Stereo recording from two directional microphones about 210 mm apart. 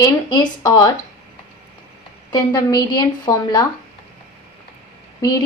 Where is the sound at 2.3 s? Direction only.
20° left (ahead or behind).